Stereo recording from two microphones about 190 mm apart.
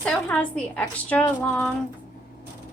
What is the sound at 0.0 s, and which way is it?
A woman's voice, 5° left (ahead or behind).